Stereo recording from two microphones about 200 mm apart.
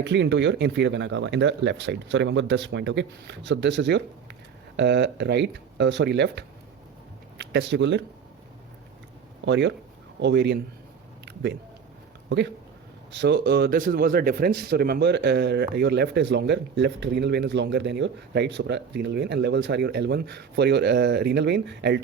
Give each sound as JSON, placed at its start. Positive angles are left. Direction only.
{"t": 0.0, "sound": "a man's voice", "side_deg": -60}
{"t": 9.5, "sound": "a man's voice", "side_deg": -60}
{"t": 13.1, "sound": "a man's voice", "side_deg": -60}